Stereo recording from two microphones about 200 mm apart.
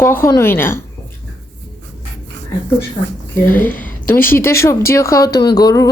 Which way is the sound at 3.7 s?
10° left (ahead or behind).